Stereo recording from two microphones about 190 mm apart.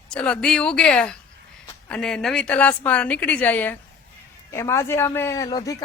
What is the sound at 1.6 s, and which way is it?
A woman's voice, 5° left (ahead or behind).